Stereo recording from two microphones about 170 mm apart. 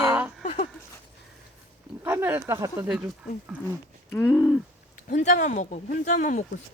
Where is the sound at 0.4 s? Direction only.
35° left (ahead or behind).